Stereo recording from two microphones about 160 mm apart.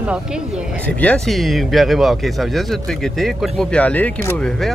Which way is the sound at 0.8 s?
10° left (ahead or behind).